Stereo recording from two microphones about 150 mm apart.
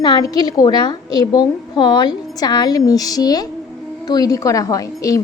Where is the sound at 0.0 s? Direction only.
25° left (ahead or behind).